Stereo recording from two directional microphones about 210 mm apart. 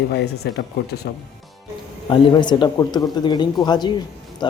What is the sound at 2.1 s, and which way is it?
A man's voice, 20° left (ahead or behind).